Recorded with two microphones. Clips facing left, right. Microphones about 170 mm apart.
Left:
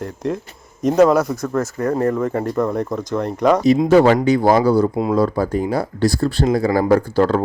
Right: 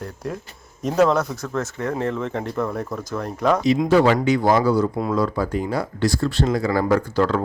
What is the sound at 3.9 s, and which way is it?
Speech, 45° left (ahead or behind).